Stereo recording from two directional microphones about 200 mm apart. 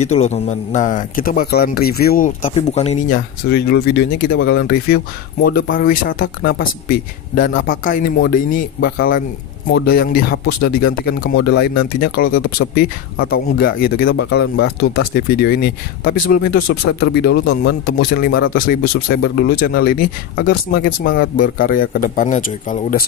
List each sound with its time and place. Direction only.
0.0 s speech: 35° left (ahead or behind)
3.4 s speech: 55° left (ahead or behind)